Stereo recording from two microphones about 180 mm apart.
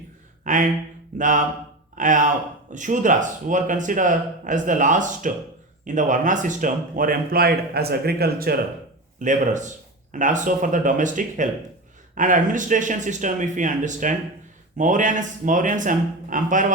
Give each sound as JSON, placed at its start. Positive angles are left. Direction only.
{"t": 0.4, "sound": "speech", "side_deg": -45}
{"t": 9.1, "sound": "speech", "side_deg": -45}